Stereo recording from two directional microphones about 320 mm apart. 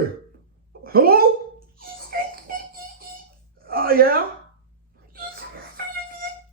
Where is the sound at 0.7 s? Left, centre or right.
Right.